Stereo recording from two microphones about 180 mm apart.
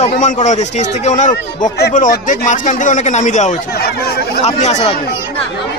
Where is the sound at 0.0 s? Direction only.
40° left (ahead or behind).